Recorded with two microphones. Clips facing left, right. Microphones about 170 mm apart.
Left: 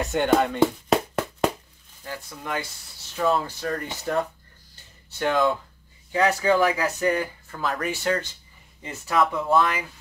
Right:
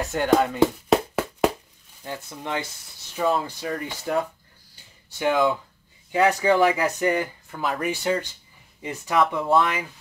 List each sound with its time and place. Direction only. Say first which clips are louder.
0.0 s music: even; centre (ahead or behind)
2.0 s speech: right 1 dB; 20° right (ahead or behind)
3.2 s speech: even; 10° right (ahead or behind)
4.7 s a sound: left 2 dB; 10° right (ahead or behind)
6.1 s speech: right 1 dB; 20° right (ahead or behind)
9.2 s speech: right 1 dB; centre (ahead or behind)